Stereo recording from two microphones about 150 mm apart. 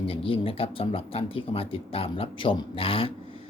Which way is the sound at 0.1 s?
35° left (ahead or behind).